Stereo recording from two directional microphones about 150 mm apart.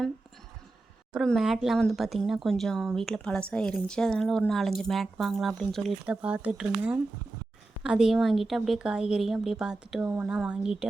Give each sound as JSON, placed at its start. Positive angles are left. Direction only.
{"t": 1.1, "sound": "speech", "side_deg": 0}
{"t": 6.1, "sound": "speech", "side_deg": -10}
{"t": 7.8, "sound": "speech", "side_deg": -5}